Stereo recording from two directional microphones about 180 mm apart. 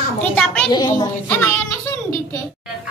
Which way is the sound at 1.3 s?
10° left (ahead or behind).